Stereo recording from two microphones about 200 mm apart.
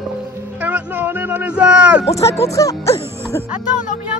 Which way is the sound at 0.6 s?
10° right (ahead or behind).